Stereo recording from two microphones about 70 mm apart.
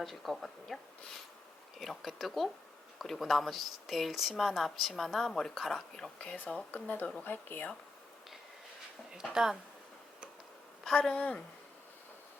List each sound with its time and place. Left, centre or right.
0.0 s speech: centre; by 7.7 s left
9.2 s speech: centre
10.8 s a woman's voice: centre